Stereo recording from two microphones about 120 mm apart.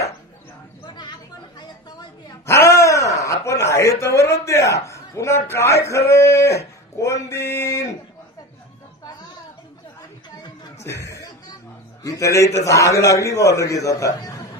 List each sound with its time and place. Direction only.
0.9 s chatter: 35° left (ahead or behind)
2.4 s a man's voice: 25° left (ahead or behind)
10.8 s chuckle: 25° left (ahead or behind)
12.0 s a man's voice: 25° left (ahead or behind)